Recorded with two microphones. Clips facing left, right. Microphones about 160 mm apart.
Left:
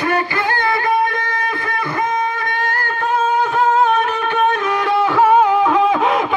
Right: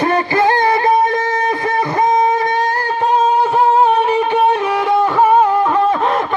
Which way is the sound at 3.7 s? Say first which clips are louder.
Right 1 dB; 35° right (ahead or behind).